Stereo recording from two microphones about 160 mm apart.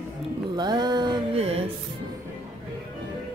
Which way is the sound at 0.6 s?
25° right (ahead or behind).